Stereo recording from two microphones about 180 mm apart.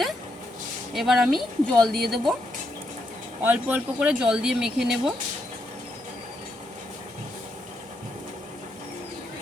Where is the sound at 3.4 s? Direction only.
10° right (ahead or behind).